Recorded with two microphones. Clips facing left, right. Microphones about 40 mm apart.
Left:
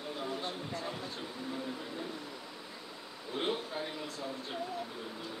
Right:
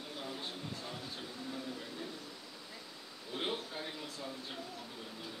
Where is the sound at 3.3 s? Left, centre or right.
Centre.